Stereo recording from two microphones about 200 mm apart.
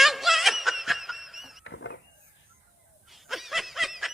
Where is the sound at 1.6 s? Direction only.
65° left (ahead or behind).